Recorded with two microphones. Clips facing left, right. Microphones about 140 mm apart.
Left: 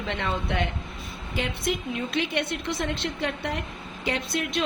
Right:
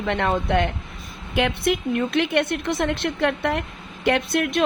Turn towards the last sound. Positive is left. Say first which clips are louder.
# right 7 dB
turn(degrees=-60)  # may be behind; listen again after turning